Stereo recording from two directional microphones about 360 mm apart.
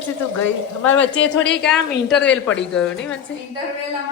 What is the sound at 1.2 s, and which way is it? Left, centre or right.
Speech, left.